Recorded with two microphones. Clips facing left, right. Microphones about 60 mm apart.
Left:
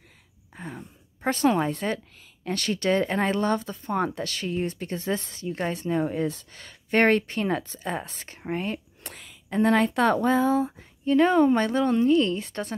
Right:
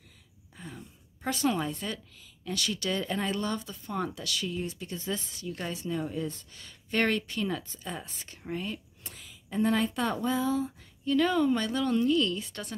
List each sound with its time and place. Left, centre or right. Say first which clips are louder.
0.6 s a woman's voice: left 6 dB; left
5.3 s speech: left 7 dB; left
9.0 s speech: left 5 dB; left